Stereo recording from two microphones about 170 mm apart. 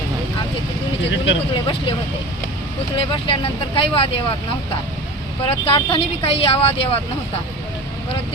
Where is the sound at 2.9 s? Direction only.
35° left (ahead or behind).